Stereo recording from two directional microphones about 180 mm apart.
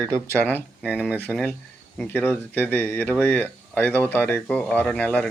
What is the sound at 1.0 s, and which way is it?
Speech, 5° right (ahead or behind).